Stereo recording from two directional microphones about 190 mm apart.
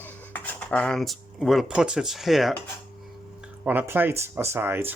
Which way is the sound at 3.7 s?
10° right (ahead or behind).